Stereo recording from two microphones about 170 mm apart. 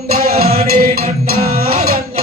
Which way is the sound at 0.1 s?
60° right (ahead or behind).